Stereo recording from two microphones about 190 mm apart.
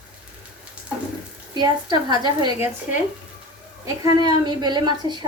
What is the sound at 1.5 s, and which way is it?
Speech, 25° right (ahead or behind).